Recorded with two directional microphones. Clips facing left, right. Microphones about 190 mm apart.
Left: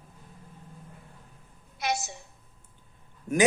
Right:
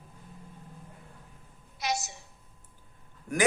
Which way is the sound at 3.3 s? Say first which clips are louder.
Left 5 dB; 25° left (ahead or behind).